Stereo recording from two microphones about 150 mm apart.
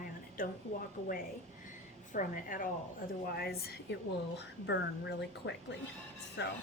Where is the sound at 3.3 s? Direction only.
90° left.